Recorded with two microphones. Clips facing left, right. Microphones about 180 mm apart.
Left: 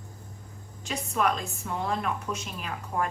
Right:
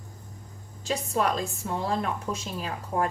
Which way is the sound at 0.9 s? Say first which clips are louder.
Right 1 dB; 30° right (ahead or behind).